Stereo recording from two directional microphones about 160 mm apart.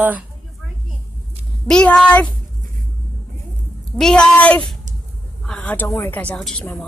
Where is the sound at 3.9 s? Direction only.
5° left (ahead or behind).